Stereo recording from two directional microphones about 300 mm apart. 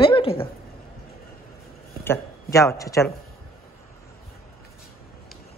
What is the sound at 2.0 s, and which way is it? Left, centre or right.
Speech, centre.